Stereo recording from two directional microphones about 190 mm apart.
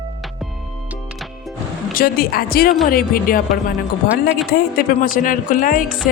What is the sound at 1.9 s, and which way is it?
Speech, 50° left (ahead or behind).